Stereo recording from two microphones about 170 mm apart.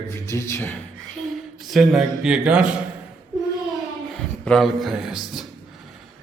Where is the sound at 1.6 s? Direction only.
Centre (ahead or behind).